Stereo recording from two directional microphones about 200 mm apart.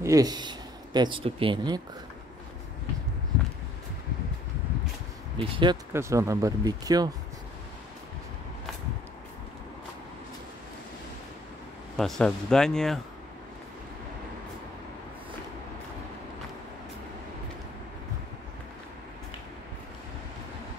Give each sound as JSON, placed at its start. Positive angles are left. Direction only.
{"t": 0.0, "sound": "speech", "side_deg": -15}
{"t": 5.4, "sound": "speech", "side_deg": -25}
{"t": 12.0, "sound": "speech", "side_deg": 5}